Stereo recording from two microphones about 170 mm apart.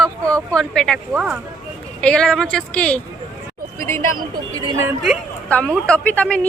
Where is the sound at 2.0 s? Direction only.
5° left (ahead or behind).